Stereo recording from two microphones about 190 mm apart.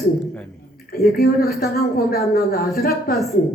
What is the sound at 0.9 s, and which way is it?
Speech, 55° left (ahead or behind).